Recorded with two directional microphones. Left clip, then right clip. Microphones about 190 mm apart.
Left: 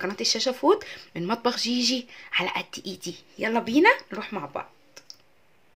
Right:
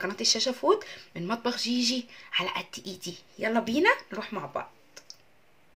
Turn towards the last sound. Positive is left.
turn(degrees=20)  # may be behind; listen again after turning